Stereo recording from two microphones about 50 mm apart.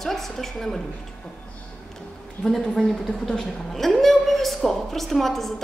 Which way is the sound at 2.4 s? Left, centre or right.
Centre.